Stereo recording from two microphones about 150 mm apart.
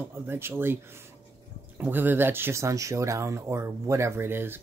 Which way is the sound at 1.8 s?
15° right (ahead or behind).